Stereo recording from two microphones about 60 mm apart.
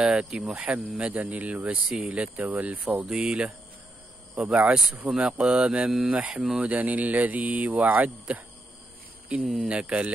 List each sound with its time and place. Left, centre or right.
0.0 s speech: centre
0.5 s speech: right
5.2 s speech: centre
6.6 s speech: right
9.7 s speech: centre